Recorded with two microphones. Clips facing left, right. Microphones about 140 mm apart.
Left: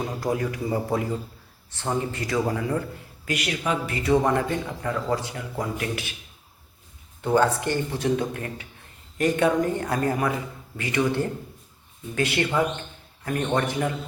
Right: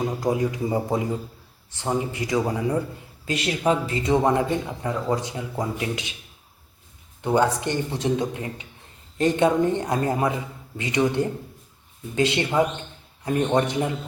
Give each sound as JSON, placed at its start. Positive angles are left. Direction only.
{"t": 0.2, "sound": "a man's voice", "side_deg": -20}
{"t": 7.2, "sound": "speech", "side_deg": -15}